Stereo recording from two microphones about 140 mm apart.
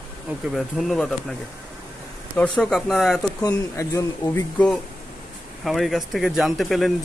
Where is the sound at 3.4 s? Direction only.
20° left (ahead or behind).